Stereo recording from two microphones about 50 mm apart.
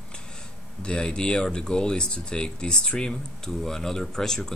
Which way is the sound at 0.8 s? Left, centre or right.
Centre.